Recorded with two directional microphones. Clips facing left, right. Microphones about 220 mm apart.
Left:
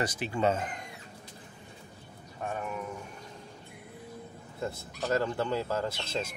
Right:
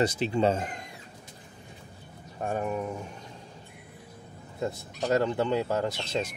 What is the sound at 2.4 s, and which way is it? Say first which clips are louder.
Speech: right 6 dB; 35° right (ahead or behind).